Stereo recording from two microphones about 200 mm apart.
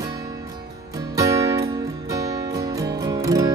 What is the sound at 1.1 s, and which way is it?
Music, 15° right (ahead or behind).